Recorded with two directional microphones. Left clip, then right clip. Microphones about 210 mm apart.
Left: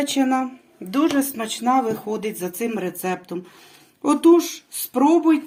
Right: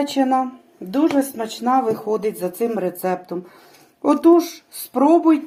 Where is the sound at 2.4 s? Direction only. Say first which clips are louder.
Right 4 dB; 35° left (ahead or behind).